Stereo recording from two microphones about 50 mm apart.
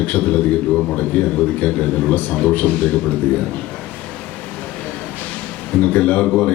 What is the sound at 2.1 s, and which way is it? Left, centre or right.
A man's voice, left.